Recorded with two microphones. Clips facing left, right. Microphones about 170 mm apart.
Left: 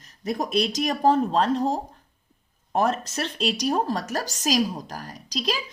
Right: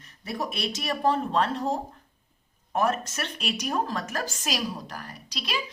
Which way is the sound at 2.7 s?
30° left (ahead or behind).